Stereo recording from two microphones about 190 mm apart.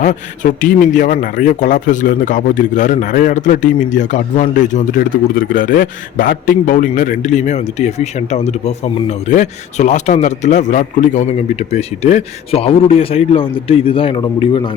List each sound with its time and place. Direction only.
0.0 s speech: 40° left (ahead or behind); by 14.7 s 25° left (ahead or behind)